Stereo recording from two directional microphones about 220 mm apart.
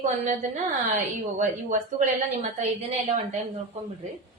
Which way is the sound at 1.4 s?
35° right (ahead or behind).